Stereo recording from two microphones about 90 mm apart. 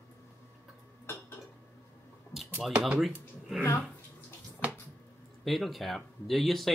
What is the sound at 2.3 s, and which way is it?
Computer keyboard, centre (ahead or behind).